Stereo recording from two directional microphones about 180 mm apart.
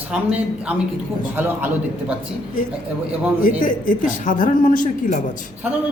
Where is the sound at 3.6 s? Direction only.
45° left (ahead or behind).